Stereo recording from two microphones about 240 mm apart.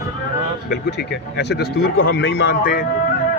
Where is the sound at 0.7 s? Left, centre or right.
Left.